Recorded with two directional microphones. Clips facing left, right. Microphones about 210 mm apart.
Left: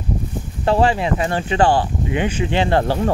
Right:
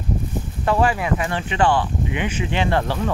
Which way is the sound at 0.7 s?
30° left (ahead or behind).